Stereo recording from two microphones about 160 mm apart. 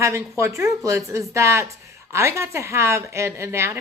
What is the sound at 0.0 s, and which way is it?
A woman's voice, 20° right (ahead or behind).